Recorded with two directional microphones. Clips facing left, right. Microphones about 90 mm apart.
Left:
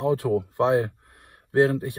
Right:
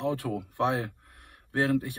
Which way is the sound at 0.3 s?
30° left (ahead or behind).